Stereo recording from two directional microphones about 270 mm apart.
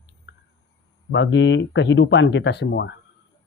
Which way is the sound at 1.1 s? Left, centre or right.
Left.